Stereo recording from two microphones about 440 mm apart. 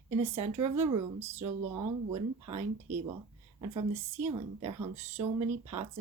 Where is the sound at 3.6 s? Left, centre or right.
Centre.